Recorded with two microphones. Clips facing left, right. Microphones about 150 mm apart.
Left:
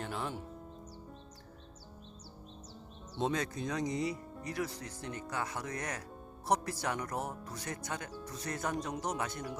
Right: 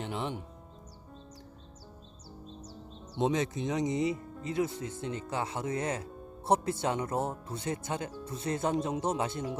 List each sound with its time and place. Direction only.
0.0 s speech: 20° right (ahead or behind)
3.2 s speech: 20° right (ahead or behind)